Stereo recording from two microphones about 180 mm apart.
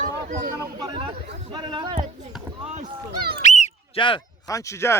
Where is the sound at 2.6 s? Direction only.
35° right (ahead or behind).